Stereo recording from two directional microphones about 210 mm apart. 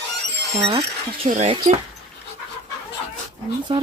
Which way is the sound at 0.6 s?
30° right (ahead or behind).